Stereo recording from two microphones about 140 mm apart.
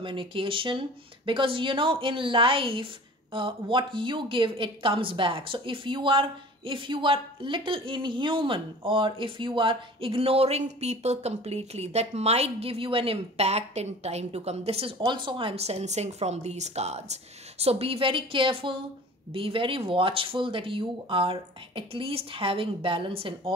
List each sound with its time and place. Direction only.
0.0 s a woman's voice: 35° right (ahead or behind)